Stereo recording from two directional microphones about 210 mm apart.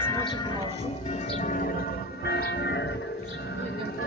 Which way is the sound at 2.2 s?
50° left (ahead or behind).